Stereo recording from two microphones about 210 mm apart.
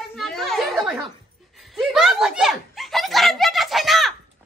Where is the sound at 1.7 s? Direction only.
Centre (ahead or behind).